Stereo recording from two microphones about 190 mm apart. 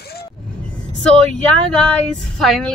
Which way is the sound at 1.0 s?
5° left (ahead or behind).